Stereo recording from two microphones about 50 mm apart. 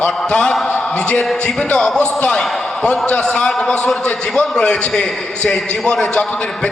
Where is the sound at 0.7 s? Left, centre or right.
Left.